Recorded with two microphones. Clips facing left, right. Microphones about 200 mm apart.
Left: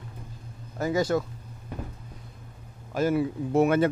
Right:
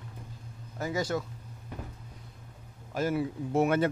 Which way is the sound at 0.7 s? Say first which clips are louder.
Left 6 dB; 90° left.